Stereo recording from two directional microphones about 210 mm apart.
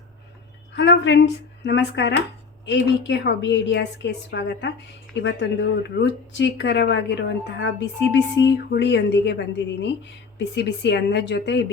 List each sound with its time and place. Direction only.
0.8 s speech: 60° left (ahead or behind)